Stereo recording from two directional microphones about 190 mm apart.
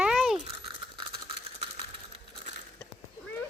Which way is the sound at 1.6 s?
30° right (ahead or behind).